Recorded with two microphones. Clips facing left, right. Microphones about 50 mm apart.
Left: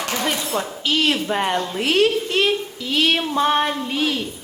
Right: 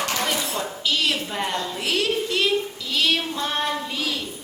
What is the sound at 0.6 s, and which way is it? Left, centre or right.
A woman's voice, left.